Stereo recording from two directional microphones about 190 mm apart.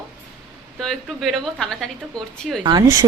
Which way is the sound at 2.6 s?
20° right (ahead or behind).